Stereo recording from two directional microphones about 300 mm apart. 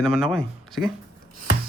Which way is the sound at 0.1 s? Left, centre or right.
Centre.